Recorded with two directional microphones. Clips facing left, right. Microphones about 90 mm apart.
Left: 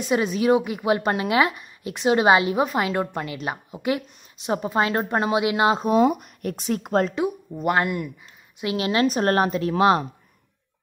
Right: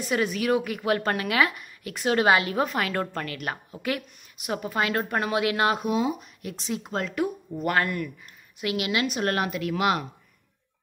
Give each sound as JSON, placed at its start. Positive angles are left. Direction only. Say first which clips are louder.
{"t": 0.0, "sound": "speech", "louder": "left 4 dB", "side_deg": 20}
{"t": 5.9, "sound": "speech", "louder": "left 7 dB", "side_deg": 55}
{"t": 7.2, "sound": "a woman's voice", "louder": "left 4 dB", "side_deg": 15}